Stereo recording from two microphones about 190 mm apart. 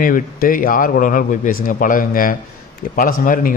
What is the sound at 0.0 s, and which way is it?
Speech, 45° left (ahead or behind).